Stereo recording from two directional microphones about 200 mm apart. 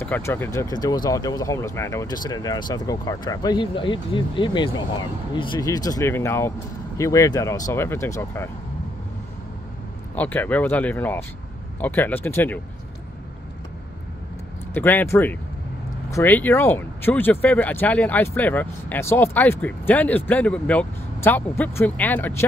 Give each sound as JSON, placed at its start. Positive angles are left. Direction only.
{"t": 0.0, "sound": "speech", "side_deg": 10}
{"t": 10.1, "sound": "speech", "side_deg": 10}
{"t": 14.7, "sound": "speech", "side_deg": 10}